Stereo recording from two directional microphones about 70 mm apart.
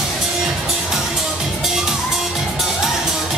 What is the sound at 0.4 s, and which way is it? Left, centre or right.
Music, centre.